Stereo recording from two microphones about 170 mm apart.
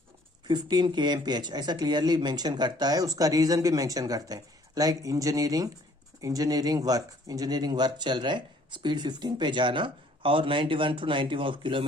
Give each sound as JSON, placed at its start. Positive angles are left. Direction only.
{"t": 0.4, "sound": "speech", "side_deg": -25}